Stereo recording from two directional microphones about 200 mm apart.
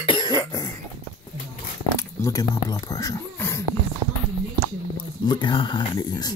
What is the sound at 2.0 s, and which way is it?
Speech, 15° left (ahead or behind).